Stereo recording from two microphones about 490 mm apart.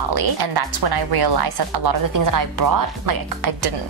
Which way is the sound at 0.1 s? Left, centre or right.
Right.